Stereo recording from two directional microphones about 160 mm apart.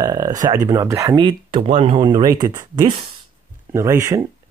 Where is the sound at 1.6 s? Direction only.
40° right (ahead or behind).